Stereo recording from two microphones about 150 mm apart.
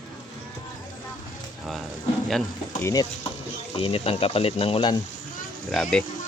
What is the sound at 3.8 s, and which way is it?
Speech, 40° left (ahead or behind).